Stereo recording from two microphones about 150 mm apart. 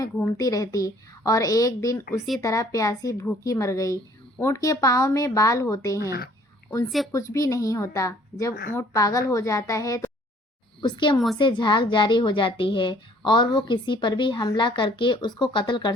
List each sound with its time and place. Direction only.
0.0 s a woman's voice: 25° left (ahead or behind)
7.1 s a woman's voice: 20° left (ahead or behind)